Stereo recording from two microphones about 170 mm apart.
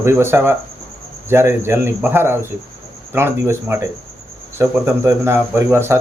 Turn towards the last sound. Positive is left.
turn(degrees=-15)  # may be behind; listen again after turning